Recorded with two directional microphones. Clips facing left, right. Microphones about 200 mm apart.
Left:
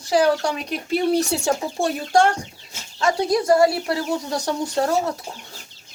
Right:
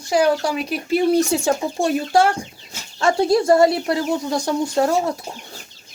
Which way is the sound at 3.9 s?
15° right (ahead or behind).